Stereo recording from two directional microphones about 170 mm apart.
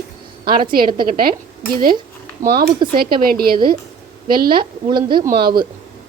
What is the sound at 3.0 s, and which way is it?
Speech, 60° right (ahead or behind).